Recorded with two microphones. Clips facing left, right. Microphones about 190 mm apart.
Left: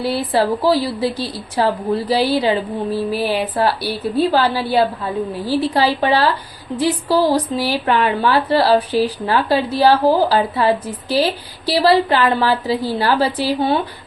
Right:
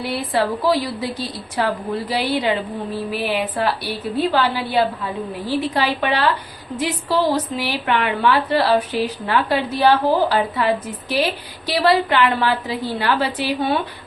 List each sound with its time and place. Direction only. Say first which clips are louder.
0.0 s a woman's voice: left 3 dB; 35° left (ahead or behind)